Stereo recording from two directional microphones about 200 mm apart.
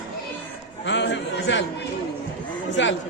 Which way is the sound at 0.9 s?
65° left (ahead or behind).